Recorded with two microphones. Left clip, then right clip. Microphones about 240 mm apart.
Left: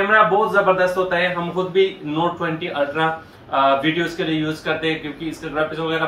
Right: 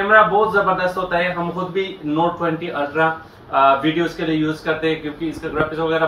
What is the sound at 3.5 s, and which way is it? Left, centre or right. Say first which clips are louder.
Speech: right 2 dB; left.